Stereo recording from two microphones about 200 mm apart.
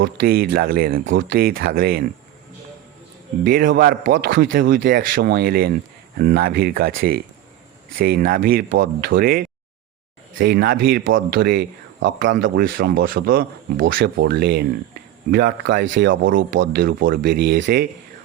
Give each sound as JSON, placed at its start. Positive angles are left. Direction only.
{"t": 0.0, "sound": "speech", "side_deg": -50}
{"t": 3.4, "sound": "speech", "side_deg": -45}